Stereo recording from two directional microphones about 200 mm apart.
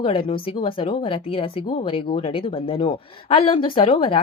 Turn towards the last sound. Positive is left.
turn(degrees=25)  # may be behind; listen again after turning